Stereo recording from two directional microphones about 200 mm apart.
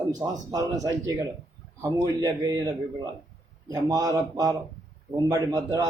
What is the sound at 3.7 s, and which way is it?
A man's voice, 15° right (ahead or behind).